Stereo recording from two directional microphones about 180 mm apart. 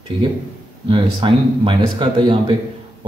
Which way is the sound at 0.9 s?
25° right (ahead or behind).